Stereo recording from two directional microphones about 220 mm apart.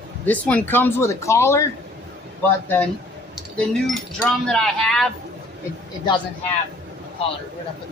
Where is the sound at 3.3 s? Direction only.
Centre (ahead or behind).